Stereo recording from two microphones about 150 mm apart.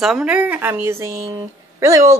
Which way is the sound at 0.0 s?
5° right (ahead or behind).